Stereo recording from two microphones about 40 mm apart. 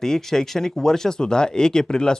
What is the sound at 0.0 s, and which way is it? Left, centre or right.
Speech, centre.